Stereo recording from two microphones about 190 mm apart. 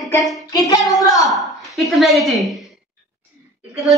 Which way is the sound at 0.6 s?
20° left (ahead or behind).